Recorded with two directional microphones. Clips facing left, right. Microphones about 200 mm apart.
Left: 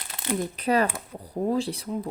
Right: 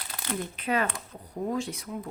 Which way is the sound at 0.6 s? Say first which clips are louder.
Left 5 dB; 40° left (ahead or behind).